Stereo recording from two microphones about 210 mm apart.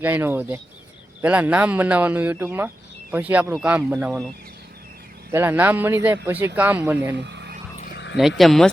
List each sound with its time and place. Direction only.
0.0 s speech: 10° right (ahead or behind)
5.3 s speech: 10° right (ahead or behind)
7.2 s a sound: 55° right (ahead or behind)
8.4 s speech: centre (ahead or behind)